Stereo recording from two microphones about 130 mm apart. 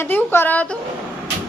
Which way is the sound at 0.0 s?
15° left (ahead or behind).